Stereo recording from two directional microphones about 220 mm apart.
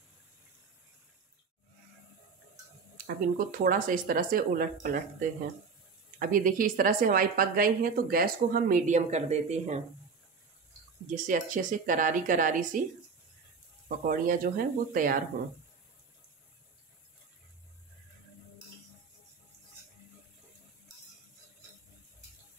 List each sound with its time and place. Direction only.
3.0 s a woman's voice: 40° right (ahead or behind)
6.1 s a woman's voice: 40° right (ahead or behind)
11.2 s a woman's voice: 35° right (ahead or behind)
13.8 s a woman's voice: 40° right (ahead or behind)